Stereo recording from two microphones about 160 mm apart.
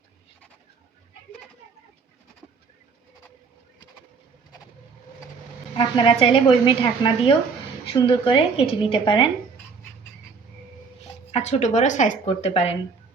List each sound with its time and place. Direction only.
5.7 s speech: 30° left (ahead or behind)
11.3 s a woman's voice: 40° left (ahead or behind)
12.2 s speech: 35° left (ahead or behind)